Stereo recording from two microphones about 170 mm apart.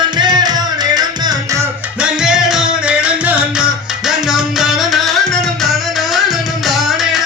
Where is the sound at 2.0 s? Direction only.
5° right (ahead or behind).